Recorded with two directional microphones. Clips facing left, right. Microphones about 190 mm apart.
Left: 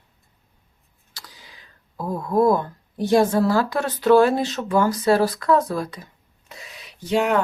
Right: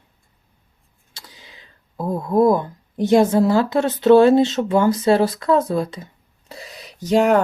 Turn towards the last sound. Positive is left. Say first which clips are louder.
# right 5 dB
turn(degrees=-40)  # may be behind; listen again after turning